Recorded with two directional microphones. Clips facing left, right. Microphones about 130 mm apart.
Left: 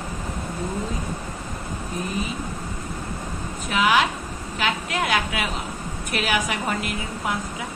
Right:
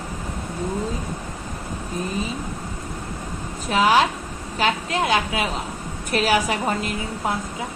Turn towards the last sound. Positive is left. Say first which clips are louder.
# right 2 dB
turn(degrees=-35)  # may be behind; listen again after turning